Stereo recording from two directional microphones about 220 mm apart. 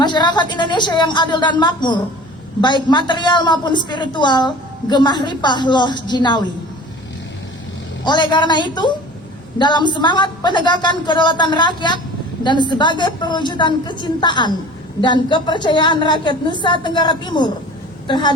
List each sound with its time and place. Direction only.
0.0 s a woman's voice: 20° left (ahead or behind)
8.0 s a woman's voice: 20° left (ahead or behind)